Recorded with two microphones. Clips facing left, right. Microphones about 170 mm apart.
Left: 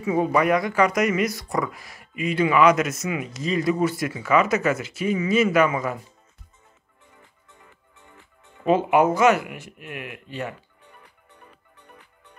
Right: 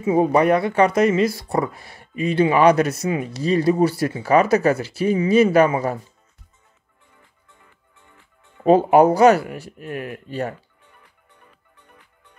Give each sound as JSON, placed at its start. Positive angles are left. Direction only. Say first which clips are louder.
{"t": 0.0, "sound": "speech", "louder": "right 4 dB", "side_deg": -30}
{"t": 8.6, "sound": "speech", "louder": "right 5 dB", "side_deg": -35}